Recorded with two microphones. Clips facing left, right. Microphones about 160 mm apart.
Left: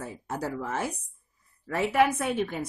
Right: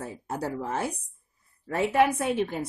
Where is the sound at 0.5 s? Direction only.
30° right (ahead or behind).